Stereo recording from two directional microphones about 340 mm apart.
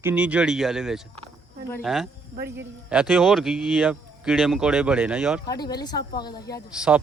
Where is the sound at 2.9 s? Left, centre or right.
Centre.